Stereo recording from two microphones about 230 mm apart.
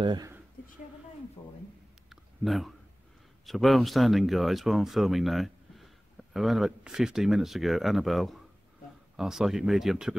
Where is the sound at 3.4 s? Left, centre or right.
Centre.